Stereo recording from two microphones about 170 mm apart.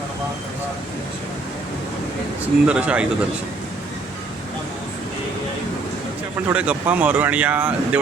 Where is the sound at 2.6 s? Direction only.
5° right (ahead or behind).